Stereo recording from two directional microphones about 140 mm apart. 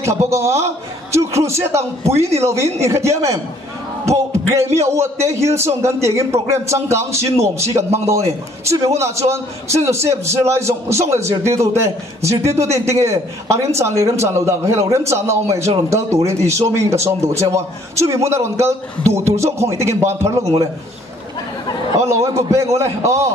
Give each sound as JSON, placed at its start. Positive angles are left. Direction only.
{"t": 0.0, "sound": "a man's voice", "side_deg": -20}
{"t": 15.9, "sound": "speech", "side_deg": -50}
{"t": 16.3, "sound": "a man's voice", "side_deg": -20}
{"t": 21.9, "sound": "a man's voice", "side_deg": -20}